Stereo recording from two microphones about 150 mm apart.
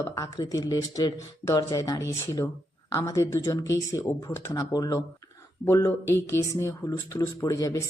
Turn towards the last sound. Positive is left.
turn(degrees=20)  # may be behind; listen again after turning